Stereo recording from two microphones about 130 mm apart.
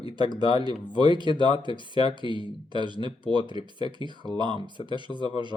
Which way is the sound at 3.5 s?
45° left (ahead or behind).